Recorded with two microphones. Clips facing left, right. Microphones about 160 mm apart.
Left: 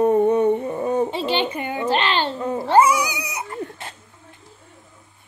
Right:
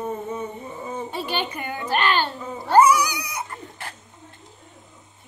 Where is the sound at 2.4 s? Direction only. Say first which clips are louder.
Left 9 dB; 70° left (ahead or behind).